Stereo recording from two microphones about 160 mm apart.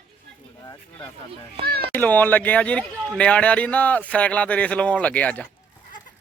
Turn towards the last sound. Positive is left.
turn(degrees=10)  # may be behind; listen again after turning